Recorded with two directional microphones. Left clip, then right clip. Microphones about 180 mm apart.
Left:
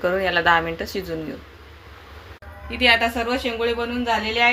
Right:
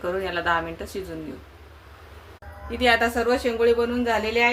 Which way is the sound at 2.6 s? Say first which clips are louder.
Left 3 dB; 45° right (ahead or behind).